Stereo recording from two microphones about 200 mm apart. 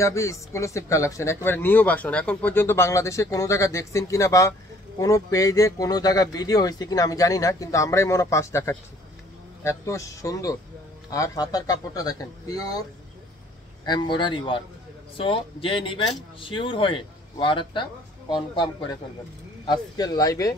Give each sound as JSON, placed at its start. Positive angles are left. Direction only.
{"t": 0.0, "sound": "speech", "side_deg": 15}
{"t": 13.8, "sound": "speech", "side_deg": 25}